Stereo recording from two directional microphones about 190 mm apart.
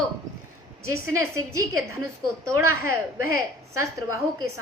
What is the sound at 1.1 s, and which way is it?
Speech, 15° right (ahead or behind).